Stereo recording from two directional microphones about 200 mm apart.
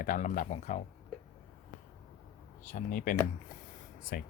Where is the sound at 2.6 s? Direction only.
40° left (ahead or behind).